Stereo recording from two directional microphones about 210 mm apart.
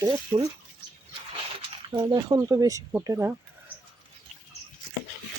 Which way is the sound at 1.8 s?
20° right (ahead or behind).